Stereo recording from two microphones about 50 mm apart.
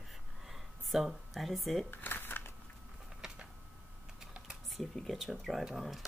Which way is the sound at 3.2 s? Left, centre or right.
Centre.